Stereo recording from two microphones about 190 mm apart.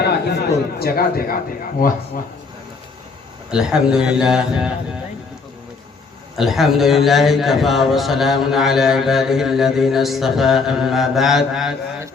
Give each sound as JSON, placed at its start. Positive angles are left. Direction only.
{"t": 0.0, "sound": "a sound", "side_deg": 60}
{"t": 0.8, "sound": "a man's voice", "side_deg": 50}
{"t": 3.5, "sound": "a man's voice", "side_deg": -5}
{"t": 6.3, "sound": "a man's voice", "side_deg": 0}